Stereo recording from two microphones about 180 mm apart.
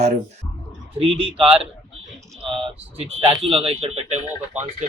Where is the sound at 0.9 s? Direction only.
30° right (ahead or behind).